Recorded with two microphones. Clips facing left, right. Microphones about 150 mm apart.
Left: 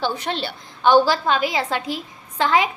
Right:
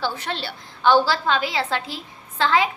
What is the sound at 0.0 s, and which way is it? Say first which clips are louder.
A woman's voice: left 3 dB; 20° left (ahead or behind).